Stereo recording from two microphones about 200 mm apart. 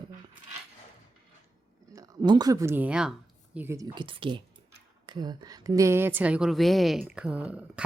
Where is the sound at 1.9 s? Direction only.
20° right (ahead or behind).